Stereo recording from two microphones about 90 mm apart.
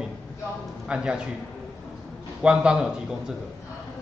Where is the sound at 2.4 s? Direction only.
10° right (ahead or behind).